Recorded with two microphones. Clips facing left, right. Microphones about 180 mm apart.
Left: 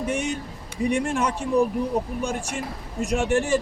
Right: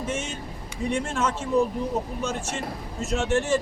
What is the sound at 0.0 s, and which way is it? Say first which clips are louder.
Speech: left 4 dB; 15° left (ahead or behind).